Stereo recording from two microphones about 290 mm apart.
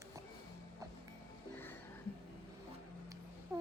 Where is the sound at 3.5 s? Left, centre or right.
Centre.